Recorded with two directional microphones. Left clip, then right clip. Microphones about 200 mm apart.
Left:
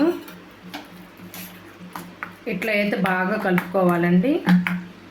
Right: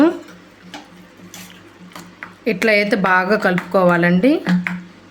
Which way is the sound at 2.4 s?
55° right (ahead or behind).